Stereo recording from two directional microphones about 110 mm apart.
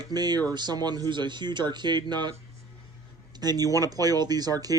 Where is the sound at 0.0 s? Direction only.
40° right (ahead or behind).